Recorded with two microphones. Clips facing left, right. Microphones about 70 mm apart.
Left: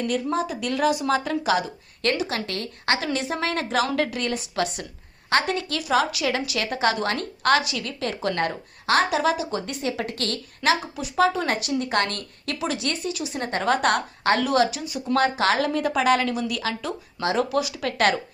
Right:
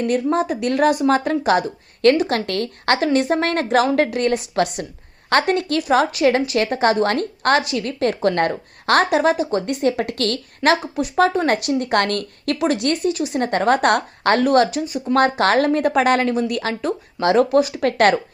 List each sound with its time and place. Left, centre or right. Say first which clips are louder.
0.0 s a woman's voice: right 6 dB; right